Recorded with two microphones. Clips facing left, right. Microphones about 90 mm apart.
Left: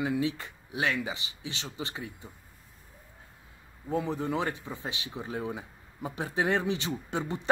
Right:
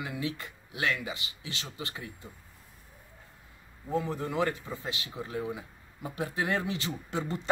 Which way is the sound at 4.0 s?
20° left (ahead or behind).